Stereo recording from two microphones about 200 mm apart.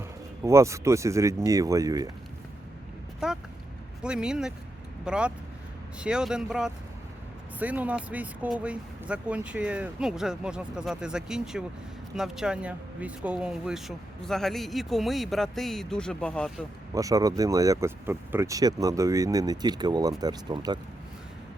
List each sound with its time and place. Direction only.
0.4 s speech: 15° right (ahead or behind)
3.2 s a sound: 5° right (ahead or behind)
4.0 s speech: 5° right (ahead or behind)
16.9 s speech: 15° right (ahead or behind)